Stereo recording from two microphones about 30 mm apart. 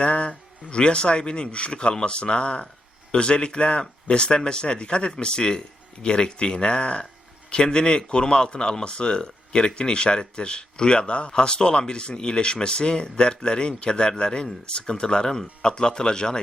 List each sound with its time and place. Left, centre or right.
0.0 s speech: left